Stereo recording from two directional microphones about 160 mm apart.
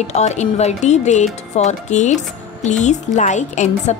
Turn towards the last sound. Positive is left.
turn(degrees=50)  # may be behind; listen again after turning